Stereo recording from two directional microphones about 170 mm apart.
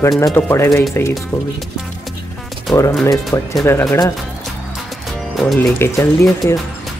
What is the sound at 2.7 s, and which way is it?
Speech, 5° left (ahead or behind).